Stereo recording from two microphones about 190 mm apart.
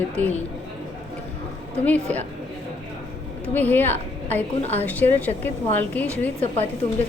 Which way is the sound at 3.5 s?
10° left (ahead or behind).